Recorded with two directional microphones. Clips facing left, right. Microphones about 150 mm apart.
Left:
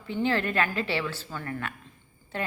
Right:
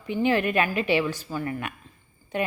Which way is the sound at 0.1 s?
15° right (ahead or behind).